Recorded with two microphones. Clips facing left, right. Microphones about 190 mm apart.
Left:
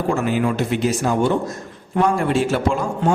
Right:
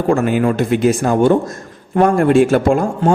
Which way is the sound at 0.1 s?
55° right (ahead or behind).